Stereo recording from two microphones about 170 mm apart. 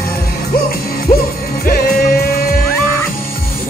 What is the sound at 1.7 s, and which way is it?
Music, 60° left (ahead or behind).